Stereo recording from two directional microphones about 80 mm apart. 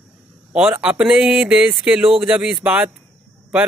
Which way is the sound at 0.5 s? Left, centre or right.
Centre.